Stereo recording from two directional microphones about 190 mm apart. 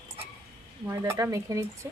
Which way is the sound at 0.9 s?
15° right (ahead or behind).